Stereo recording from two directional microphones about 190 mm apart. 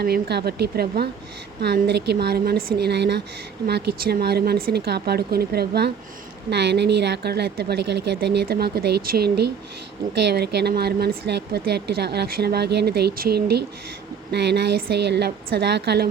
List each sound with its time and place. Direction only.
0.0 s a woman's voice: 55° right (ahead or behind)